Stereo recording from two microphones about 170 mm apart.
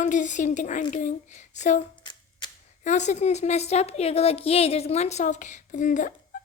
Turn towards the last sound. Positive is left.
turn(degrees=50)  # may be behind; listen again after turning